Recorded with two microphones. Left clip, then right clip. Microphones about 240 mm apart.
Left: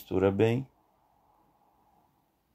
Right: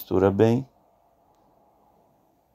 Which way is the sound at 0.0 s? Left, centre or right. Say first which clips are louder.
Right 6 dB; centre.